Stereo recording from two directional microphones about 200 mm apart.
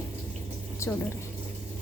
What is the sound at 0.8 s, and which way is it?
Speech, 15° left (ahead or behind).